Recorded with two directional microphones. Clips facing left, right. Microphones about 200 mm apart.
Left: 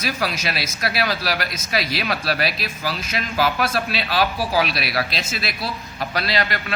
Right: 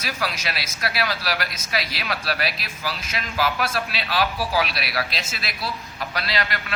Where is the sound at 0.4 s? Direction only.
20° left (ahead or behind).